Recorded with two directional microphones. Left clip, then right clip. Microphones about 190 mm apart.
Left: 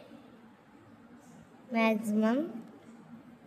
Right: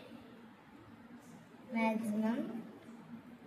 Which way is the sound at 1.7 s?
55° left (ahead or behind).